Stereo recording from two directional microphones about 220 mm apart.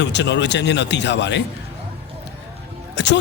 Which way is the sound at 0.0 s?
55° left (ahead or behind).